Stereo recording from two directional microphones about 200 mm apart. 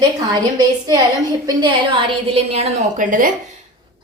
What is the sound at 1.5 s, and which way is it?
Speech, 20° right (ahead or behind).